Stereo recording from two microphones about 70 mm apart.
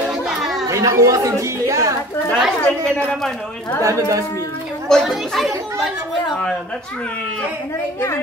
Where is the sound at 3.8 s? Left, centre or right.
Right.